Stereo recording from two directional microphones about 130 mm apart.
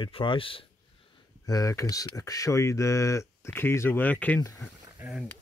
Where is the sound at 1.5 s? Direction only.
25° left (ahead or behind).